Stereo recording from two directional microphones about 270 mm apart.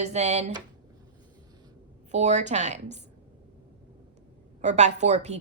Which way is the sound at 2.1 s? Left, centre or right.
Right.